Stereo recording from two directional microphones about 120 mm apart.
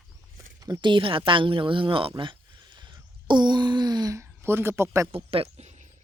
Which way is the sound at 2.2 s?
40° right (ahead or behind).